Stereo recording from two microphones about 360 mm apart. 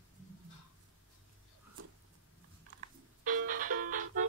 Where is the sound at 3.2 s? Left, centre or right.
Right.